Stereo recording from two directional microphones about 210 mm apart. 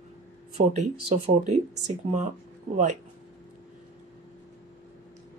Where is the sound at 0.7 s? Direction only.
35° right (ahead or behind).